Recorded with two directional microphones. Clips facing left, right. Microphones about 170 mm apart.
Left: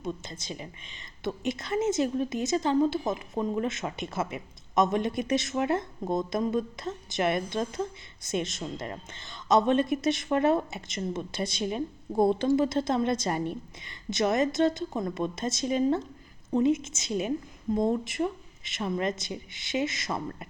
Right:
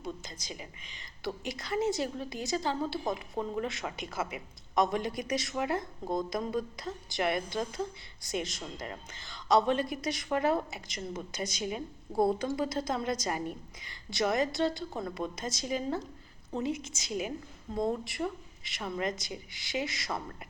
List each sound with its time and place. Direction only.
0.0 s a woman's voice: 25° left (ahead or behind)